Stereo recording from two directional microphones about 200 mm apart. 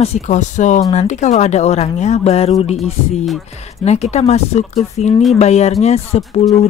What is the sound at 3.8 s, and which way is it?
Speech, 35° left (ahead or behind).